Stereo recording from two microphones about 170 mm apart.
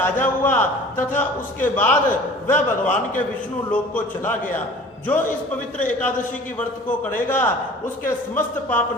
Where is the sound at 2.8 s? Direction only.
45° left (ahead or behind).